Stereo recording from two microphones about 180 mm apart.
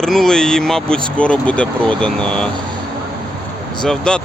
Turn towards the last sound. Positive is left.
turn(degrees=5)  # may be behind; listen again after turning